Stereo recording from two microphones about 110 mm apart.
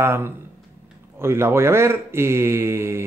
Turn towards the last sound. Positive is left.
turn(degrees=-25)  # may be behind; listen again after turning